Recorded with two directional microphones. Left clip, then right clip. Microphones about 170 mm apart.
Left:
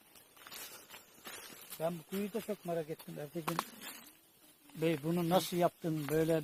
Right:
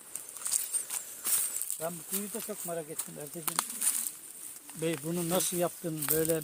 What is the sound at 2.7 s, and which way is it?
Speech, 25° left (ahead or behind).